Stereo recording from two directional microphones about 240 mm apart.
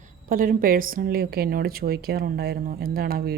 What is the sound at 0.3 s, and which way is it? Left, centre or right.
Speech, right.